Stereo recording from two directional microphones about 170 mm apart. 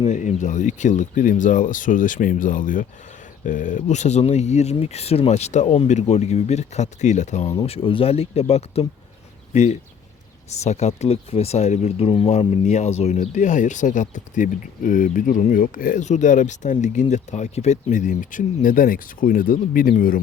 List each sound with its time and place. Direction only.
0.0 s speech: 45° left (ahead or behind)
7.6 s speech: 35° left (ahead or behind); by 20.1 s 55° left (ahead or behind)